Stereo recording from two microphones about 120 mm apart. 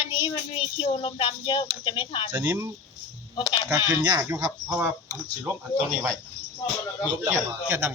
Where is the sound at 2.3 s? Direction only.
15° right (ahead or behind).